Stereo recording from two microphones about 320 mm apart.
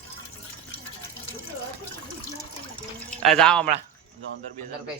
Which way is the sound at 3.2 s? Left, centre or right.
Centre.